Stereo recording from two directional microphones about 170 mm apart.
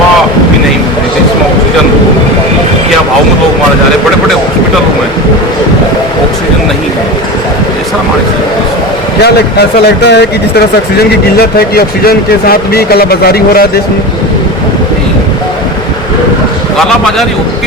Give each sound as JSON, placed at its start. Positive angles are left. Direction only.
{"t": 9.2, "sound": "speech", "side_deg": 70}
{"t": 11.3, "sound": "a man's voice", "side_deg": 65}